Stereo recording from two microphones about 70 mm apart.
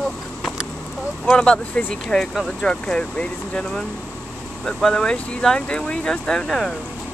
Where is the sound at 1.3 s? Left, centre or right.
Centre.